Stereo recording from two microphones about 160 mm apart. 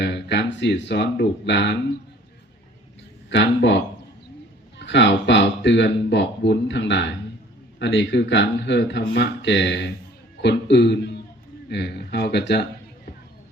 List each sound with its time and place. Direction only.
0.0 s speech: 90° left
3.3 s speech: 90° left
4.8 s speech: 90° left